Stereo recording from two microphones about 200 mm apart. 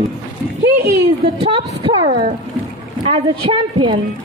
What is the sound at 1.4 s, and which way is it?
A woman's voice, 25° right (ahead or behind).